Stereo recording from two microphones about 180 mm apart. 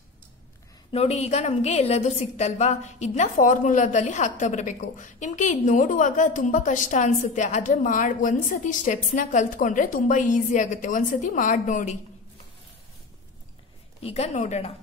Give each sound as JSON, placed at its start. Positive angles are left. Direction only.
{"t": 0.9, "sound": "a woman's voice", "side_deg": 35}
{"t": 14.0, "sound": "a woman's voice", "side_deg": 35}